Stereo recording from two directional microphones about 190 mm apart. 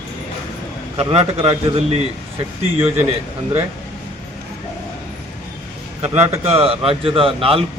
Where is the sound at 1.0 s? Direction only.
30° right (ahead or behind).